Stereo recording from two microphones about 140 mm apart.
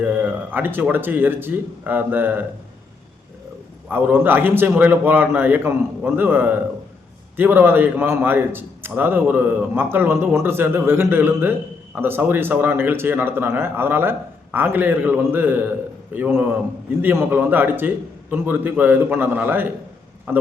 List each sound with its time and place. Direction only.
0.0 s a man's voice: 10° right (ahead or behind)
3.8 s a man's voice: 15° right (ahead or behind)